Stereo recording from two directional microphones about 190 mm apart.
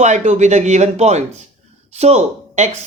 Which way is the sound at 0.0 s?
40° right (ahead or behind).